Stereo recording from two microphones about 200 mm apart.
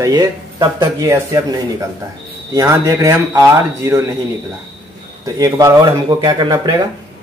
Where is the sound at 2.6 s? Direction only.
15° right (ahead or behind).